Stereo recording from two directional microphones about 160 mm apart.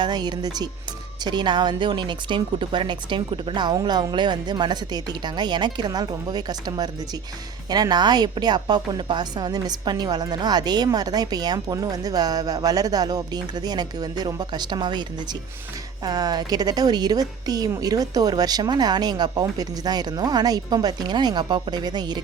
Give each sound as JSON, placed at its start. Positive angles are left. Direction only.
{"t": 0.0, "sound": "a woman's voice", "side_deg": -25}